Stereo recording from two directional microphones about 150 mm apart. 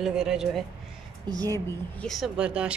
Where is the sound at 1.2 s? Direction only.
25° right (ahead or behind).